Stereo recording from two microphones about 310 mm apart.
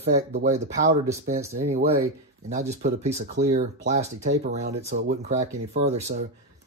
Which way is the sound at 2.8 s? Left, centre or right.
Right.